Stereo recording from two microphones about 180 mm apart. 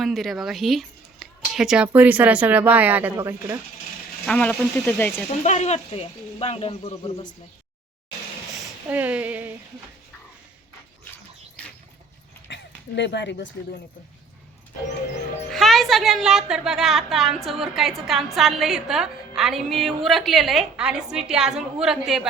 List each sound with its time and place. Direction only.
0.0 s speech: centre (ahead or behind)
4.3 s speech: 5° left (ahead or behind)
5.4 s speech: 40° left (ahead or behind)
8.9 s a sound: 10° right (ahead or behind)
12.5 s a sound: 75° left (ahead or behind)
13.0 s speech: 75° left (ahead or behind)
15.4 s a woman's voice: centre (ahead or behind)